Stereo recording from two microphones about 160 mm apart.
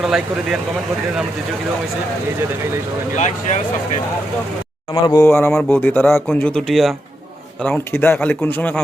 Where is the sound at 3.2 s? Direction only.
45° left (ahead or behind).